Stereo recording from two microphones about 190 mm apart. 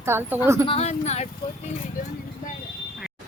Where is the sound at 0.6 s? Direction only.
30° left (ahead or behind).